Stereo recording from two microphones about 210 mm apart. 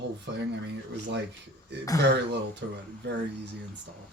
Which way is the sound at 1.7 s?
55° right (ahead or behind).